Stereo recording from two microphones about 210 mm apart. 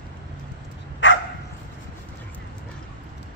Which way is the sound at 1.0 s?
60° left (ahead or behind).